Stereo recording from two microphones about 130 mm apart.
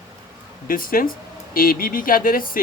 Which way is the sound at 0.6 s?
90° left.